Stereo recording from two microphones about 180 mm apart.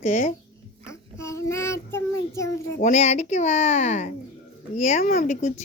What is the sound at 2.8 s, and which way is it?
Speech, 40° left (ahead or behind).